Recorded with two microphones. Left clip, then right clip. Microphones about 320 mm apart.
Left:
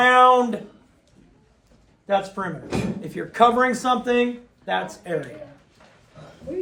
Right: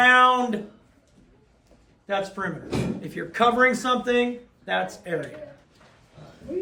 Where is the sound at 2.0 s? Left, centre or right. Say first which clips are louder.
Left 4 dB; centre.